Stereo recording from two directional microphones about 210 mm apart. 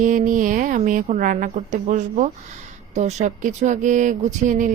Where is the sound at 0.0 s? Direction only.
40° right (ahead or behind).